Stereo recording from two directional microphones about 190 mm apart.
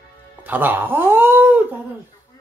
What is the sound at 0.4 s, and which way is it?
Speech, 10° right (ahead or behind).